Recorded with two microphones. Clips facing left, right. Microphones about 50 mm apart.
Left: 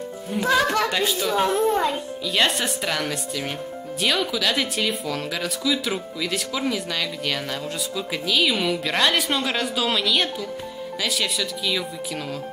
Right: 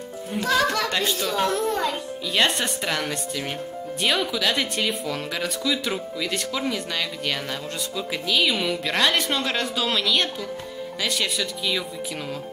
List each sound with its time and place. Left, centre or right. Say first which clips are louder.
0.4 s speech: left 2 dB; centre
1.3 s a child's voice: left 4 dB; centre
2.3 s speech: even; centre